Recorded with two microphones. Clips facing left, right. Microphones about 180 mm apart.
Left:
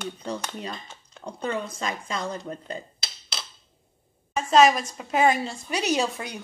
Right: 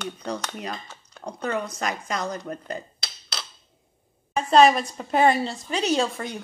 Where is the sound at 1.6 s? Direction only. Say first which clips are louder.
Right 2 dB; 25° left (ahead or behind).